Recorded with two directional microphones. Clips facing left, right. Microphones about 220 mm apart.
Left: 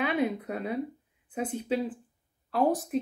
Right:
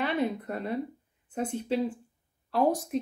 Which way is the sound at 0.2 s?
5° left (ahead or behind).